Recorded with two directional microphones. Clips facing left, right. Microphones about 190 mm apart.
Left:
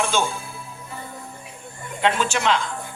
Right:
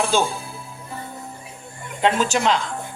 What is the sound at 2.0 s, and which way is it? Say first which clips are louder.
Speech: right 2 dB; 40° right (ahead or behind).